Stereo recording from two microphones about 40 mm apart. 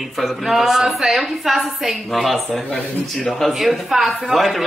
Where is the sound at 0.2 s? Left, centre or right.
Centre.